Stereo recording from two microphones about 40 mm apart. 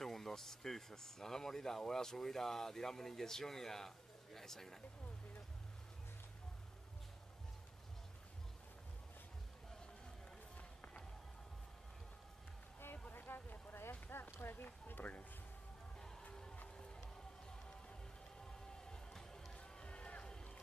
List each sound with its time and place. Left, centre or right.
0.0 s speech: centre
13.1 s a sound: left
18.9 s music: centre
19.5 s run: left